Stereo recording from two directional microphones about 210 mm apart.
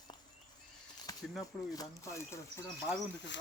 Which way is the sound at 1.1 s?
15° left (ahead or behind).